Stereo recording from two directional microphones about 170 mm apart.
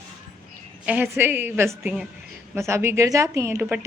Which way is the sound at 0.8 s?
10° right (ahead or behind).